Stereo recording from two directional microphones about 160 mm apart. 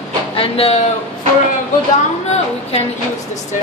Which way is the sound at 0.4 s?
35° left (ahead or behind).